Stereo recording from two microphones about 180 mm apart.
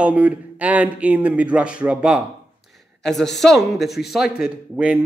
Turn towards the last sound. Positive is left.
turn(degrees=-5)  # may be behind; listen again after turning